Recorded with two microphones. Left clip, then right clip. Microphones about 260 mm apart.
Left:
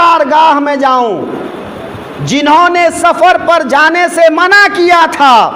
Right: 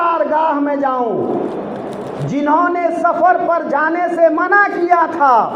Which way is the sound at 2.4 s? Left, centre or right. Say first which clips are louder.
Left 8 dB; left.